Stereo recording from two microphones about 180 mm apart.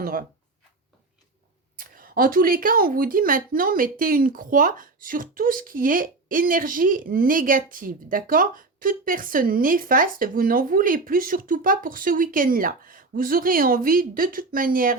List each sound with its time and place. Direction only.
0.0 s speech: 55° right (ahead or behind)
1.8 s a woman's voice: 50° right (ahead or behind)